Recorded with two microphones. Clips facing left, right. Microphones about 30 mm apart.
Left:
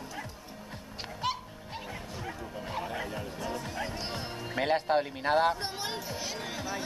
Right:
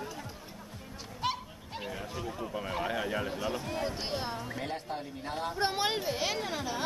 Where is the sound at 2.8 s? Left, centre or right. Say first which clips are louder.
Right 4 dB; right.